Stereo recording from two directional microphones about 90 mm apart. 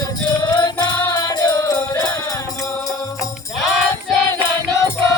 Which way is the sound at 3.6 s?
Centre (ahead or behind).